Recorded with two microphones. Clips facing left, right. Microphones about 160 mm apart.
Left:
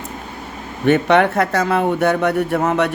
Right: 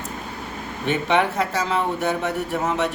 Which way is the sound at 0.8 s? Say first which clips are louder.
Left 7 dB; 60° left (ahead or behind).